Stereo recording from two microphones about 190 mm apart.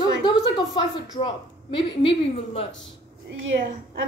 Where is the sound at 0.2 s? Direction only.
25° left (ahead or behind).